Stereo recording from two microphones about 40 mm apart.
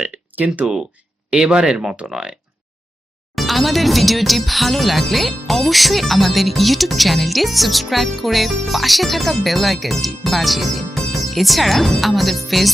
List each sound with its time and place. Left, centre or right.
0.0 s speech: right
1.3 s speech: centre
3.3 s speech: centre